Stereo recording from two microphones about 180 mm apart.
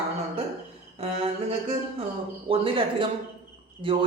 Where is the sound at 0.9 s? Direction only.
35° right (ahead or behind).